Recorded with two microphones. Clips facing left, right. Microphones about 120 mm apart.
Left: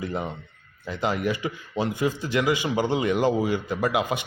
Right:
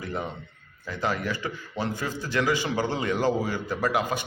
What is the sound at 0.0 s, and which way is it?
A man's voice, 20° left (ahead or behind).